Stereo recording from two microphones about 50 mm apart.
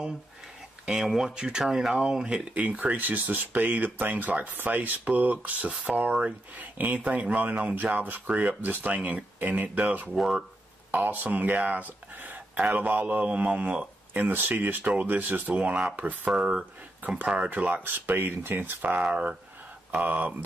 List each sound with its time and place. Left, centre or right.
1.0 s speech: centre
6.5 s speech: right
17.4 s speech: right